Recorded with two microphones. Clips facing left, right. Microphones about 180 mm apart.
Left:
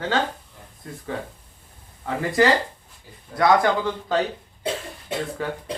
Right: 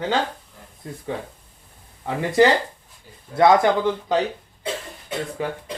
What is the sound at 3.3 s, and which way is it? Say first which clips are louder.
Speech: right 3 dB; 25° right (ahead or behind).